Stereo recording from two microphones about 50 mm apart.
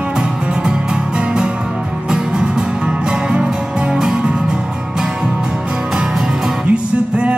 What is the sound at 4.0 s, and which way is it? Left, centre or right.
Music, centre.